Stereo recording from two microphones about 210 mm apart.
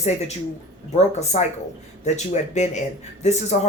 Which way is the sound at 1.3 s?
35° left (ahead or behind).